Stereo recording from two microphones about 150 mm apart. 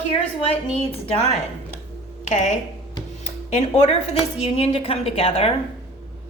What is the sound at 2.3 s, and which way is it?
A woman's voice, 55° left (ahead or behind).